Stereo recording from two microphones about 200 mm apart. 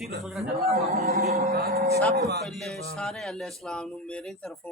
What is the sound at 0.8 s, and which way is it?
Speech, 30° right (ahead or behind).